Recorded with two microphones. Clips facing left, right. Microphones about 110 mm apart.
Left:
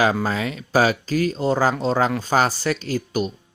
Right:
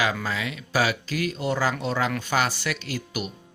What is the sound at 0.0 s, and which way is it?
Speech, 35° left (ahead or behind).